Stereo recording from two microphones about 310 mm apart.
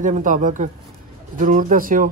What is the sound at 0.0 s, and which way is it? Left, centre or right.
Speech, right.